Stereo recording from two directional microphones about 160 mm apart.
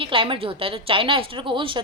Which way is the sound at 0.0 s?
35° right (ahead or behind).